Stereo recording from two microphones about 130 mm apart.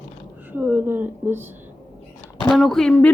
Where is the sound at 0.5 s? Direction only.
15° right (ahead or behind).